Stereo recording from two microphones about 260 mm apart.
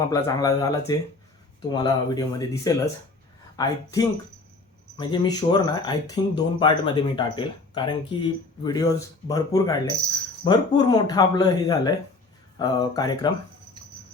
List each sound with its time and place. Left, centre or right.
0.1 s speech: centre
4.9 s speech: centre